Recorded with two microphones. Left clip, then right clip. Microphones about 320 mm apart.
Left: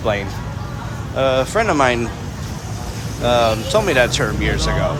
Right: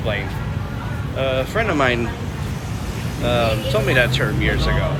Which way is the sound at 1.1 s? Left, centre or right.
Centre.